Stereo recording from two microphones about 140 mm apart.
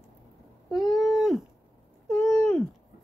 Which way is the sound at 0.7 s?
Centre (ahead or behind).